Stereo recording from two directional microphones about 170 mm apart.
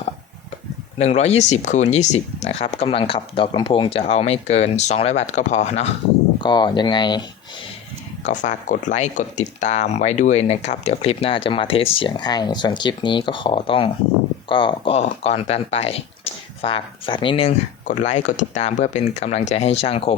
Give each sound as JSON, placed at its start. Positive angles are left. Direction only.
{"t": 0.9, "sound": "speech", "side_deg": 40}
{"t": 6.4, "sound": "speech", "side_deg": 25}
{"t": 8.2, "sound": "speech", "side_deg": 45}
{"t": 17.8, "sound": "speech", "side_deg": 45}